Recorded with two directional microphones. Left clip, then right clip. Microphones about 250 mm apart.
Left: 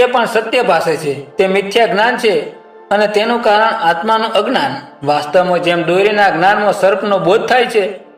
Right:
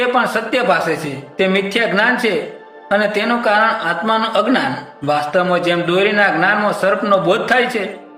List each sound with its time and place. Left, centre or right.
0.2 s a man's voice: centre